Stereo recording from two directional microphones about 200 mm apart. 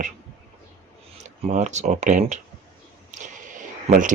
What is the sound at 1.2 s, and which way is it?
Speech, 35° right (ahead or behind).